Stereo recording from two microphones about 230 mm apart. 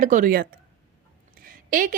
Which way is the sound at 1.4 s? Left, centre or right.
Right.